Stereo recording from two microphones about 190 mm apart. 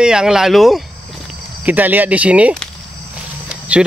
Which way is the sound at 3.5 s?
5° right (ahead or behind).